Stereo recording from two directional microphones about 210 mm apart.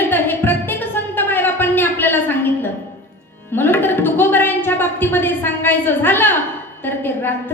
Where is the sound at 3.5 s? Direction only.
10° left (ahead or behind).